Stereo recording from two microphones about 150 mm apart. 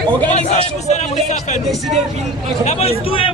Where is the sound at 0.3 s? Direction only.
50° left (ahead or behind).